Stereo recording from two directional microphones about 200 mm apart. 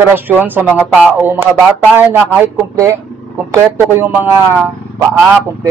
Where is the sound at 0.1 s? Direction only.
10° right (ahead or behind).